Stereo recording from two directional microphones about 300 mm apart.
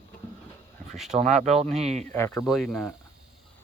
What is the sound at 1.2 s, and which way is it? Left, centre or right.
Speech, right.